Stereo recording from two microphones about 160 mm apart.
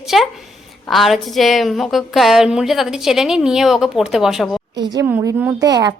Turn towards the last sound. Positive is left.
turn(degrees=-25)  # may be behind; listen again after turning